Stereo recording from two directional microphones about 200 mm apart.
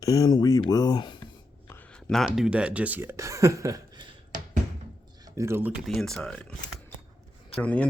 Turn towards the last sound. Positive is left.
turn(degrees=5)  # may be behind; listen again after turning